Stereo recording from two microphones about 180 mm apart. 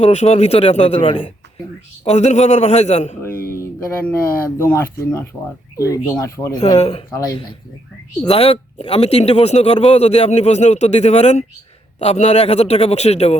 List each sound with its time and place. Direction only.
0.0 s speech: 35° left (ahead or behind)
3.5 s a sound: 15° left (ahead or behind)
4.5 s speech: 15° left (ahead or behind)
6.6 s speech: 35° left (ahead or behind)
7.1 s speech: 20° left (ahead or behind)
8.2 s speech: 35° left (ahead or behind)